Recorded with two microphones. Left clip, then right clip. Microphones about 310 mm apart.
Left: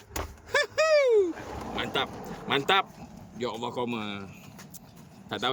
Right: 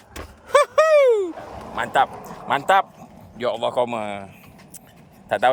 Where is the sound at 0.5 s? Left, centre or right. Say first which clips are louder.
Right 8 dB; centre.